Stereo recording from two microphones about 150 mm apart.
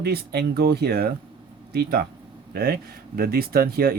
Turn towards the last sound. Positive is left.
turn(degrees=-85)